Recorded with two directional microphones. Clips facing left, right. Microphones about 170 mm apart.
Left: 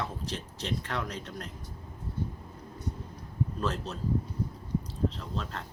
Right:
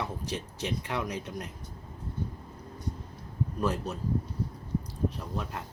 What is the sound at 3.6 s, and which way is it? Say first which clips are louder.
Speech: right 6 dB; 10° right (ahead or behind).